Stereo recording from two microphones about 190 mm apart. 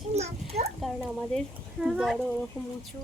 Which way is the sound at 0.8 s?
Centre (ahead or behind).